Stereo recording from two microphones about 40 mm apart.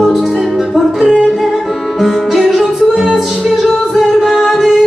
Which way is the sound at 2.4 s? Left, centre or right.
Centre.